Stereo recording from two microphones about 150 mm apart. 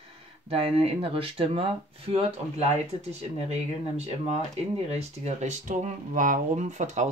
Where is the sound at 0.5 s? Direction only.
40° right (ahead or behind).